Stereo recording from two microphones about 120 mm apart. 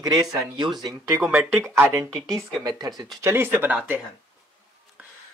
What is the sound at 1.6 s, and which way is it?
Speech, 20° right (ahead or behind).